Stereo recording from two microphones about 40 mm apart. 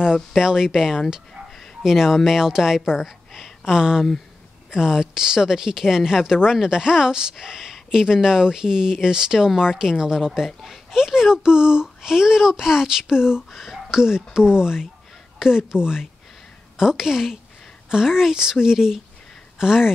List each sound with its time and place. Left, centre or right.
0.4 s a woman's voice: centre
3.7 s speech: centre